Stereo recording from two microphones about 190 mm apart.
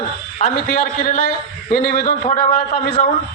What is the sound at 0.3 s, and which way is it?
A man's voice, 45° left (ahead or behind).